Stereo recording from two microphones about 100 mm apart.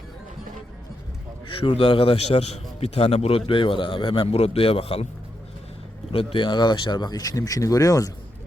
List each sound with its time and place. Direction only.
1.5 s a man's voice: 60° left (ahead or behind)
6.1 s speech: 60° left (ahead or behind); by 8.1 s 35° left (ahead or behind)